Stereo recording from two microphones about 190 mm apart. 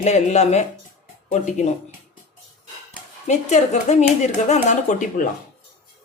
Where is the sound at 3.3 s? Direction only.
40° left (ahead or behind).